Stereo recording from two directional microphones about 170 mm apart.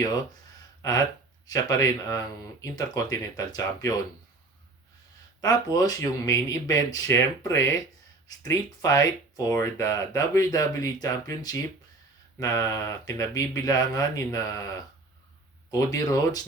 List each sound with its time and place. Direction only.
0.8 s speech: 20° left (ahead or behind)
5.4 s speech: 20° left (ahead or behind)
15.7 s speech: 20° left (ahead or behind)